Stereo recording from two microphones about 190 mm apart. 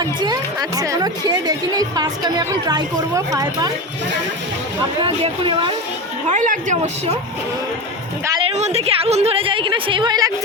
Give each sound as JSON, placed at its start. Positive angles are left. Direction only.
{"t": 0.0, "sound": "speech", "side_deg": -20}
{"t": 5.0, "sound": "speech", "side_deg": -30}
{"t": 6.2, "sound": "speech", "side_deg": -40}
{"t": 8.2, "sound": "a sound", "side_deg": -20}
{"t": 8.5, "sound": "speech", "side_deg": -35}